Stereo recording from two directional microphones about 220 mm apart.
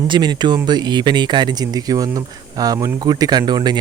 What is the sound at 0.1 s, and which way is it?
Speech, 20° right (ahead or behind).